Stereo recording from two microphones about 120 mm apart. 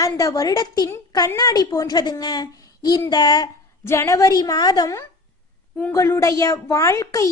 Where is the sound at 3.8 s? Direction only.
25° left (ahead or behind).